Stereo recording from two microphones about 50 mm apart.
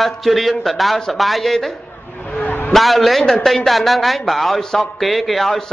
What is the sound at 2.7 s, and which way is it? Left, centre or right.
Speech, centre.